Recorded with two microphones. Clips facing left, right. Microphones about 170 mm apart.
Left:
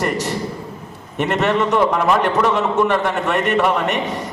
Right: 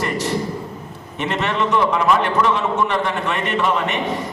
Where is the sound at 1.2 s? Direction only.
50° left (ahead or behind).